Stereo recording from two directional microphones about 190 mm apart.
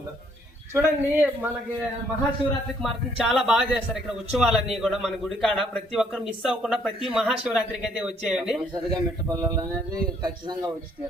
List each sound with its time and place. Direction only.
0.7 s speech: 10° right (ahead or behind)
2.8 s a man's voice: 5° right (ahead or behind)
8.7 s speech: 20° right (ahead or behind)